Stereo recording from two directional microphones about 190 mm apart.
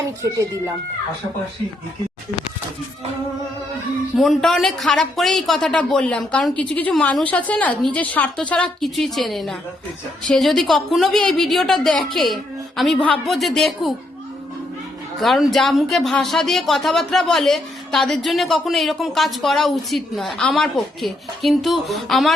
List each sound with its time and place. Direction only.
0.0 s speech: 15° right (ahead or behind)
4.2 s a woman's voice: centre (ahead or behind)
15.2 s speech: centre (ahead or behind)